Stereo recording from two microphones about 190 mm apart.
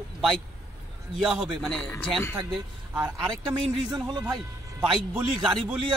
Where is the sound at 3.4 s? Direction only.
20° right (ahead or behind).